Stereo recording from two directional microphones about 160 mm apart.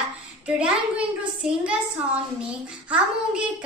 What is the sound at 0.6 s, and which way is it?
A child's voice, 5° right (ahead or behind).